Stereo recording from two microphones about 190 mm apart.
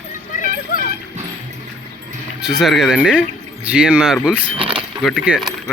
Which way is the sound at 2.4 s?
5° right (ahead or behind).